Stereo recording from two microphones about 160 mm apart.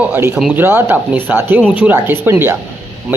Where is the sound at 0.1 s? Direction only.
15° right (ahead or behind).